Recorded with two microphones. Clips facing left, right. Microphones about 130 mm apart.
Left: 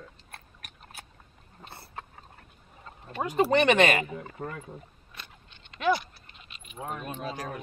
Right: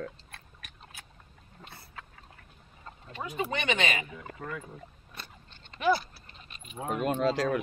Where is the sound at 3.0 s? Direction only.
50° left (ahead or behind).